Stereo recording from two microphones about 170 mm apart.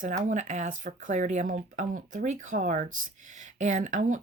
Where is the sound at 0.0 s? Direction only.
45° right (ahead or behind).